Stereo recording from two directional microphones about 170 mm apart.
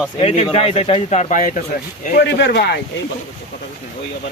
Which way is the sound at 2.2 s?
90° left.